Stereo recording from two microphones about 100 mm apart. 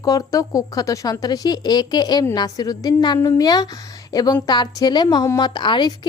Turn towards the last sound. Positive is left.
turn(degrees=50)  # may be behind; listen again after turning